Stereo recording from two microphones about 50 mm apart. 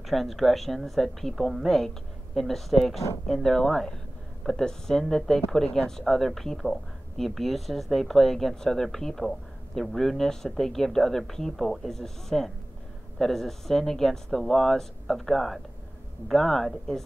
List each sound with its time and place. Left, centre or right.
0.0 s speech: centre